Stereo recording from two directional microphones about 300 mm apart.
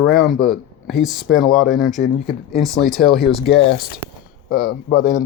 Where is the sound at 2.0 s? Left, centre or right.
Left.